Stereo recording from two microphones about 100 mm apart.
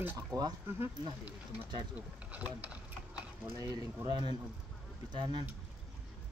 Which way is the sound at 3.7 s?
40° right (ahead or behind).